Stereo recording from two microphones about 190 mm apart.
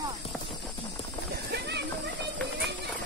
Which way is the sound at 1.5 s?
60° right (ahead or behind).